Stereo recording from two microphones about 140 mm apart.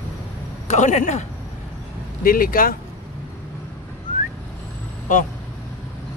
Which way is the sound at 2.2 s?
90° left.